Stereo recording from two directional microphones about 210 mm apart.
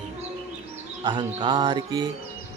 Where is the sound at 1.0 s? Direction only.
20° right (ahead or behind).